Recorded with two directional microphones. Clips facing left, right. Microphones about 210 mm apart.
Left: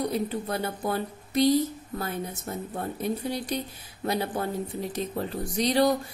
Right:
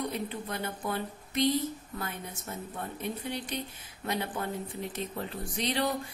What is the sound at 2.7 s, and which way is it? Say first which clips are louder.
A woman's voice: left 7 dB; 40° left (ahead or behind).